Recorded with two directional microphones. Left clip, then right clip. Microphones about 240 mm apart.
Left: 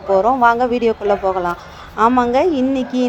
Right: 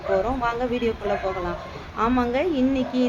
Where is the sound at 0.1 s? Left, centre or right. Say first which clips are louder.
Left 11 dB; left.